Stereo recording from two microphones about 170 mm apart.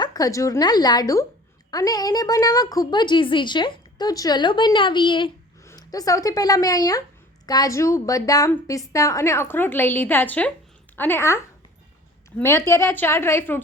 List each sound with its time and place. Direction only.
0.0 s a woman's voice: 20° left (ahead or behind)
12.4 s a woman's voice: 15° left (ahead or behind)